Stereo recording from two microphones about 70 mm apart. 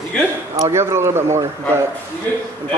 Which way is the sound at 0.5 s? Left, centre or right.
Right.